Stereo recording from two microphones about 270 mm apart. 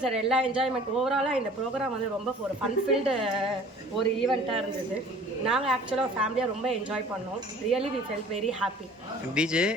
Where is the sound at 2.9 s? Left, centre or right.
Centre.